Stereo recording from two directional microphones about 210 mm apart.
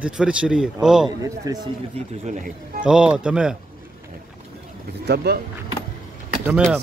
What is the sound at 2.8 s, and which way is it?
Speech, 5° right (ahead or behind).